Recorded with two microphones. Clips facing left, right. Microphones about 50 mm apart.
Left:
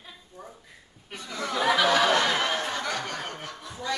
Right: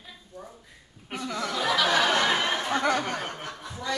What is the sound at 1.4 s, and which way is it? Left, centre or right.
Speech, left.